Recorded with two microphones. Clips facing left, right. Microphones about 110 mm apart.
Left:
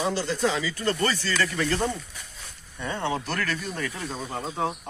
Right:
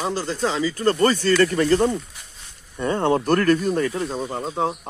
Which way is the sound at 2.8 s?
50° right (ahead or behind).